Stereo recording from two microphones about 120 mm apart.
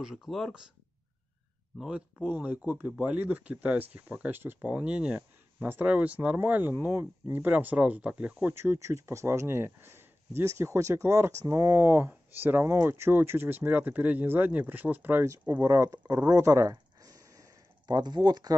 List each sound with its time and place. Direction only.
0.0 s speech: centre (ahead or behind)
1.8 s speech: 5° right (ahead or behind); by 16.7 s 25° right (ahead or behind)
16.7 s a sound: 30° right (ahead or behind)